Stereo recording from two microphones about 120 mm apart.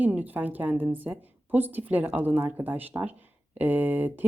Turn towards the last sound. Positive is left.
turn(degrees=-15)  # may be behind; listen again after turning